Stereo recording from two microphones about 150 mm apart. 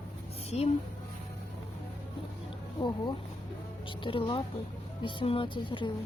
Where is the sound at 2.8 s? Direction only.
30° left (ahead or behind).